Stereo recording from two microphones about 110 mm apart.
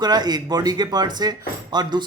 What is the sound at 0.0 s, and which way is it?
Speech, 40° right (ahead or behind).